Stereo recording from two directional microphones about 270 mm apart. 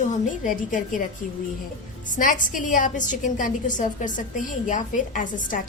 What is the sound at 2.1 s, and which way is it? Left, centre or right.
A woman's voice, left.